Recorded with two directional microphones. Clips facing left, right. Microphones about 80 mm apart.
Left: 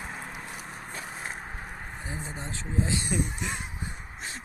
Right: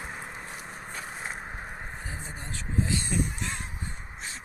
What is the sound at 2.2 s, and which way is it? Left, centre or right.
Speech, left.